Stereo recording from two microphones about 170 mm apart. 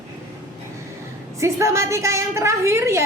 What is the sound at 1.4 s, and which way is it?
A woman's voice, 15° right (ahead or behind).